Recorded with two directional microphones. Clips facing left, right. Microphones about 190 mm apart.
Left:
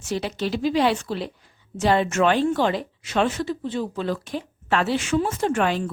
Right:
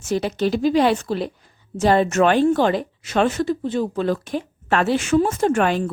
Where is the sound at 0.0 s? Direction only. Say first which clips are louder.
Right 5 dB; 45° right (ahead or behind).